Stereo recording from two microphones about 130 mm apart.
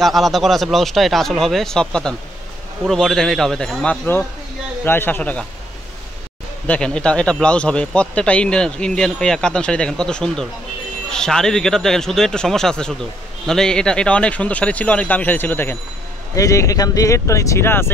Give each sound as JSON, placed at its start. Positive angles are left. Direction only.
{"t": 0.0, "sound": "speech", "side_deg": 0}
{"t": 4.8, "sound": "speech", "side_deg": 15}
{"t": 6.7, "sound": "speech", "side_deg": 5}